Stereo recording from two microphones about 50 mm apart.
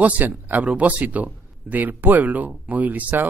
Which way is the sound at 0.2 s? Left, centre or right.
Right.